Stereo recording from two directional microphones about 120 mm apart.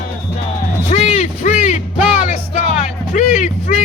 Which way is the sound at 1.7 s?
90° left.